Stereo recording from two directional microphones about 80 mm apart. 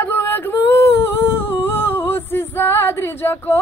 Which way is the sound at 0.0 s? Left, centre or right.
Left.